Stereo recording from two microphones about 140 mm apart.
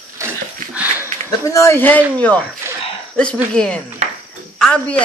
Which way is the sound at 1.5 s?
20° left (ahead or behind).